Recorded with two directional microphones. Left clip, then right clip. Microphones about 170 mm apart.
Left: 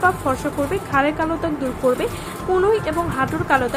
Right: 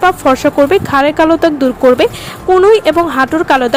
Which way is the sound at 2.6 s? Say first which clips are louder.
Right 12 dB; 50° right (ahead or behind).